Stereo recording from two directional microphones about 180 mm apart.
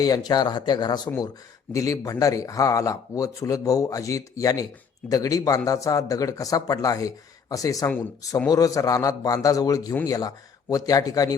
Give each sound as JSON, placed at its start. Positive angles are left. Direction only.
{"t": 0.0, "sound": "speech", "side_deg": 20}
{"t": 9.9, "sound": "speech", "side_deg": 10}
{"t": 10.2, "sound": "speech", "side_deg": 20}